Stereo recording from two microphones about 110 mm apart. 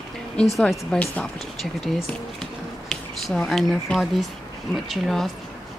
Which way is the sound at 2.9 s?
5° left (ahead or behind).